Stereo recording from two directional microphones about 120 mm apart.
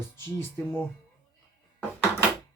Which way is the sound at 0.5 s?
20° left (ahead or behind).